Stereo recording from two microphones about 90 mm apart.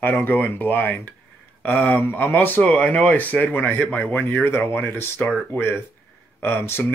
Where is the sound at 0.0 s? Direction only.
20° left (ahead or behind).